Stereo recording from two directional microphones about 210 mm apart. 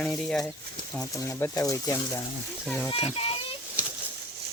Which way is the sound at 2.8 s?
25° left (ahead or behind).